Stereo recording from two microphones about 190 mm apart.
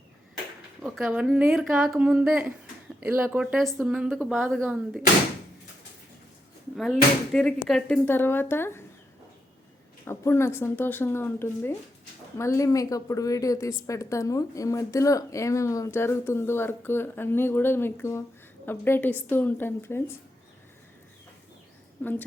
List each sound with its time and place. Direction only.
0.8 s speech: centre (ahead or behind)
6.7 s a woman's voice: 5° left (ahead or behind)
10.1 s a woman's voice: 15° left (ahead or behind)